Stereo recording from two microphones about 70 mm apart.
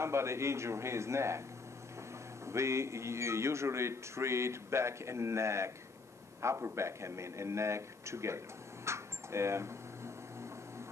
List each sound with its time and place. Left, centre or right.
0.0 s a man's voice: right
2.4 s a man's voice: right
8.8 s a sound: right